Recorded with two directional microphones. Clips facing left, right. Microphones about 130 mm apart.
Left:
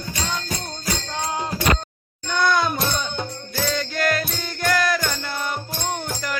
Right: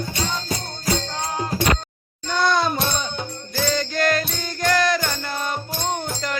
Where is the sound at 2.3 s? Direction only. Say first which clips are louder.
Even; 25° right (ahead or behind).